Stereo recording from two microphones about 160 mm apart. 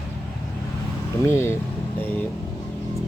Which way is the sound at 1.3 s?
15° left (ahead or behind).